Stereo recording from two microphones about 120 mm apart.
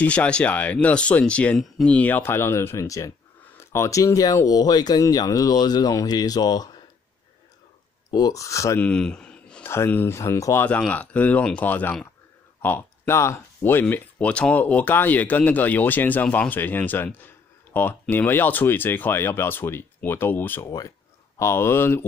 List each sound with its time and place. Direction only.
0.0 s speech: 10° left (ahead or behind); by 6.8 s 35° left (ahead or behind)
8.1 s speech: 30° left (ahead or behind)
8.7 s a sound: 10° left (ahead or behind)
9.7 s speech: 20° left (ahead or behind)